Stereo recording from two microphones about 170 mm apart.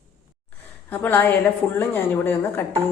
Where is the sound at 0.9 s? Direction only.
10° left (ahead or behind).